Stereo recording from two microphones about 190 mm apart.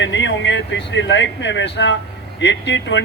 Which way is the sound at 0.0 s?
70° left (ahead or behind).